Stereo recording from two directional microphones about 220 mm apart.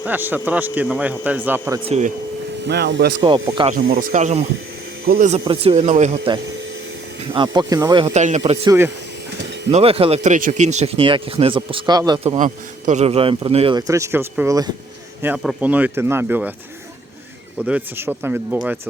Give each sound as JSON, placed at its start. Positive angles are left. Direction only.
{"t": 0.0, "sound": "speech", "side_deg": -10}
{"t": 1.9, "sound": "speech", "side_deg": -35}
{"t": 2.6, "sound": "speech", "side_deg": -50}
{"t": 3.2, "sound": "speech", "side_deg": -20}
{"t": 3.6, "sound": "speech", "side_deg": -30}
{"t": 3.8, "sound": "speech", "side_deg": -45}
{"t": 5.0, "sound": "speech", "side_deg": -45}
{"t": 5.3, "sound": "speech", "side_deg": -25}
{"t": 8.1, "sound": "speech", "side_deg": -30}
{"t": 9.7, "sound": "speech", "side_deg": -25}
{"t": 17.7, "sound": "speech", "side_deg": -10}